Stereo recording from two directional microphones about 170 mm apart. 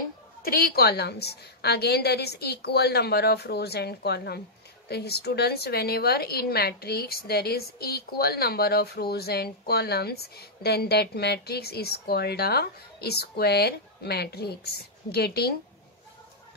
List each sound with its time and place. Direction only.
0.4 s a woman's voice: 60° left (ahead or behind)